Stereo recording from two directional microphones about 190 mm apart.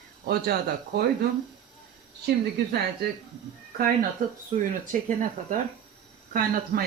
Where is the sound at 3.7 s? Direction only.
50° right (ahead or behind).